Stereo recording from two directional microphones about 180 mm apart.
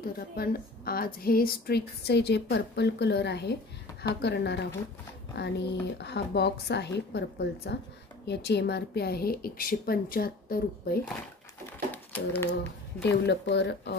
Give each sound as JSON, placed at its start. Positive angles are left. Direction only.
{"t": 0.4, "sound": "speech", "side_deg": 55}
{"t": 11.9, "sound": "a sound", "side_deg": 10}
{"t": 13.0, "sound": "speech", "side_deg": 70}